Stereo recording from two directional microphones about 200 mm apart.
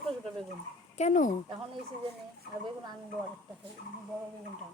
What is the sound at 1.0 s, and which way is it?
Speech, 40° left (ahead or behind).